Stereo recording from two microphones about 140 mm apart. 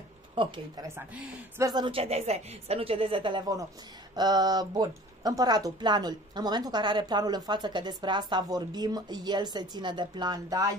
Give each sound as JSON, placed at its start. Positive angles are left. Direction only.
{"t": 0.9, "sound": "speech", "side_deg": -10}
{"t": 1.6, "sound": "speech", "side_deg": -30}